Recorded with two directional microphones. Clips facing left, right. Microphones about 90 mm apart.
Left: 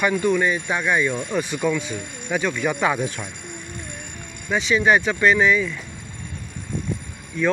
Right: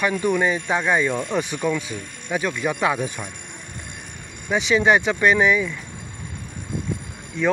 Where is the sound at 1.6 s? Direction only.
5° right (ahead or behind).